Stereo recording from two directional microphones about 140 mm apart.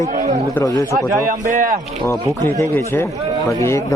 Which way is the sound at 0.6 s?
25° left (ahead or behind).